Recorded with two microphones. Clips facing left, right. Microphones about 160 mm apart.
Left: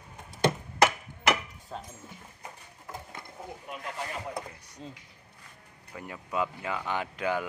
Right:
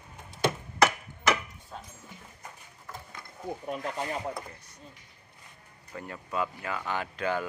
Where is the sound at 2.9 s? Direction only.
25° left (ahead or behind).